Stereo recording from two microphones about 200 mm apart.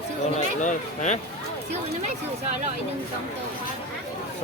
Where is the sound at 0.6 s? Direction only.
35° left (ahead or behind).